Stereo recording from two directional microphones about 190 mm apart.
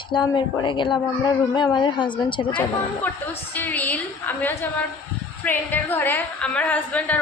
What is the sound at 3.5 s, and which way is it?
A woman's voice, 10° left (ahead or behind).